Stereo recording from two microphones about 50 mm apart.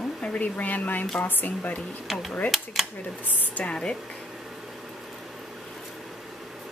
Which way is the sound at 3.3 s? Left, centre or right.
Left.